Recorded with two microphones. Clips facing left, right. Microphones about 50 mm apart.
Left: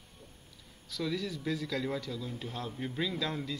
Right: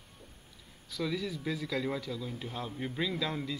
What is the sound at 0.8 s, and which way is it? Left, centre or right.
Speech, centre.